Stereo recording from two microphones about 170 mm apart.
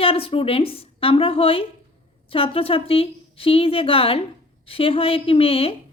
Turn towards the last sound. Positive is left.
turn(degrees=35)  # may be behind; listen again after turning